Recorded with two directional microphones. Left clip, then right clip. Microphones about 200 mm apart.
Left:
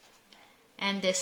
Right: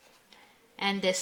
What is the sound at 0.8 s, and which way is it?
Speech, 30° right (ahead or behind).